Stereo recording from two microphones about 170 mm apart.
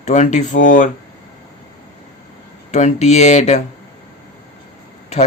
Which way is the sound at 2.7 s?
40° left (ahead or behind).